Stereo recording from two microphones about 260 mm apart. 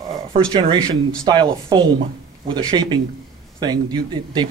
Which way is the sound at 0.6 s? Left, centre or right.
Centre.